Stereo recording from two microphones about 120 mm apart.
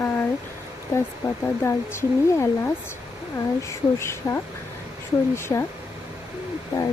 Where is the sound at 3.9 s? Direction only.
25° left (ahead or behind).